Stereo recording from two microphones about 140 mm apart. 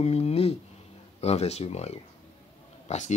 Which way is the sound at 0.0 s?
50° left (ahead or behind).